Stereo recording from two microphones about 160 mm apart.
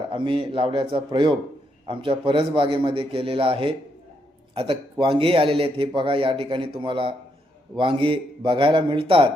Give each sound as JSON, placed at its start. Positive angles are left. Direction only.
{"t": 0.1, "sound": "a man's voice", "side_deg": -30}